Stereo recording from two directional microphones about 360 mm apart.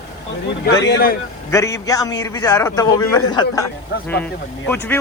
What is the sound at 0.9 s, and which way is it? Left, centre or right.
Speech, left.